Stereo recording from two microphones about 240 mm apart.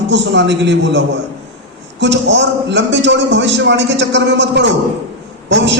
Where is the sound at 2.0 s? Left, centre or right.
Right.